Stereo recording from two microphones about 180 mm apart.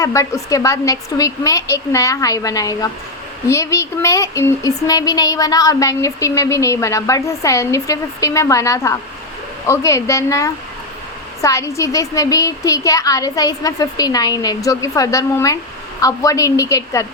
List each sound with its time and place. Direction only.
0.0 s a woman's voice: 15° left (ahead or behind)